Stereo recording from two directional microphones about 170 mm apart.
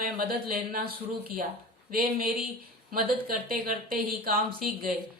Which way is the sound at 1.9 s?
60° right (ahead or behind).